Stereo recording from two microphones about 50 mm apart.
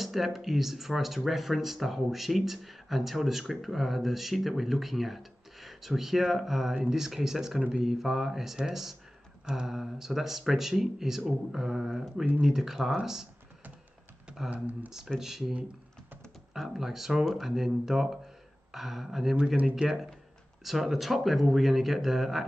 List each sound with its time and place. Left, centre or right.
0.0 s speech: centre
14.5 s speech: right
15.1 s speech: centre
16.5 s speech: centre